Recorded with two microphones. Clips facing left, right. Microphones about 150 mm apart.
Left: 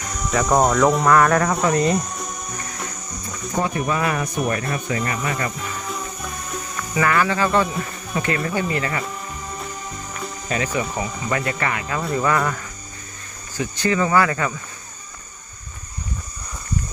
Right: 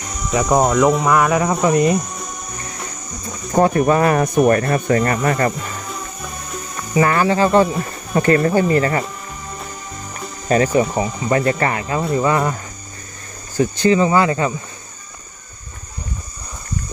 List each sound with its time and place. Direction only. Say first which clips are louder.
0.3 s speech: right 2 dB; 5° right (ahead or behind)
3.5 s speech: right 9 dB; 50° right (ahead or behind)
6.7 s speech: right 4 dB; 30° right (ahead or behind)
10.5 s speech: right 9 dB; 40° right (ahead or behind)
13.7 s speech: right 3 dB; 25° right (ahead or behind)